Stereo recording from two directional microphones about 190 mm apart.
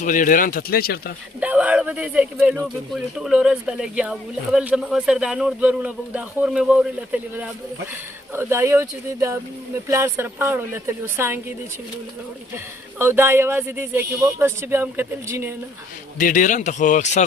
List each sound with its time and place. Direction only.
0.0 s speech: 45° left (ahead or behind)
1.4 s speech: 5° right (ahead or behind)
13.0 s speech: 10° right (ahead or behind)
16.1 s a man's voice: 45° left (ahead or behind)